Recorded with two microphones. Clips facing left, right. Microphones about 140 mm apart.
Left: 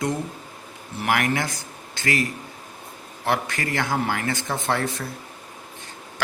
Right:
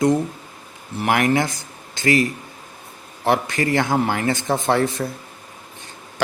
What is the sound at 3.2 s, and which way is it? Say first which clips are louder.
Speech: right 6 dB; 25° right (ahead or behind).